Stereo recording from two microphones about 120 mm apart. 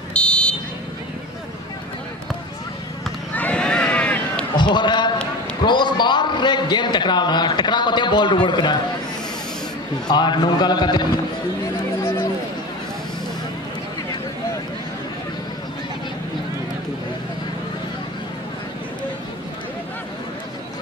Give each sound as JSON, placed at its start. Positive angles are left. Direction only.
{"t": 0.1, "sound": "car alarm", "side_deg": 10}
{"t": 3.3, "sound": "run", "side_deg": 10}
{"t": 4.6, "sound": "a sound", "side_deg": 40}
{"t": 5.6, "sound": "a man's voice", "side_deg": 40}
{"t": 10.0, "sound": "a man's voice", "side_deg": 40}